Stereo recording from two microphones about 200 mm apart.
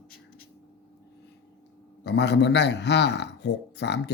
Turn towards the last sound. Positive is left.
turn(degrees=60)  # may be behind; listen again after turning